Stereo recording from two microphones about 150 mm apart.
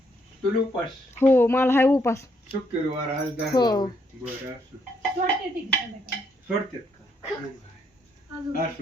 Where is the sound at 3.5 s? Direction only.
30° left (ahead or behind).